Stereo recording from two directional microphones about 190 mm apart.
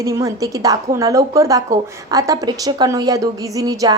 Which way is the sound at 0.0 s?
15° right (ahead or behind).